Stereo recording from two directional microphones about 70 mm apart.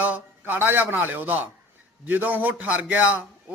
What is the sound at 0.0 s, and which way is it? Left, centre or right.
A man's voice, right.